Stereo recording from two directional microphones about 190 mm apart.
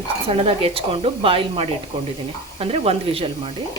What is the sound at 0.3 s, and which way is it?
Speech, 30° right (ahead or behind).